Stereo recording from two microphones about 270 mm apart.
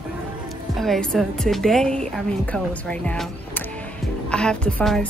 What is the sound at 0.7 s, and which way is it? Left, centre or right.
A woman's voice, centre.